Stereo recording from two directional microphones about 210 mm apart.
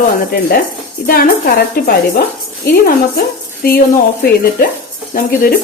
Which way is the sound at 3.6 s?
45° left (ahead or behind).